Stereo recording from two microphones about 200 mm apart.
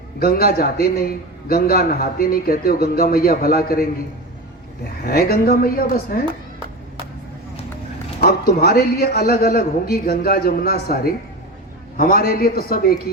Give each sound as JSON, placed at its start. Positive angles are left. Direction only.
{"t": 0.2, "sound": "a man's voice", "side_deg": 50}
{"t": 5.0, "sound": "a man's voice", "side_deg": 50}
{"t": 8.2, "sound": "a man's voice", "side_deg": 50}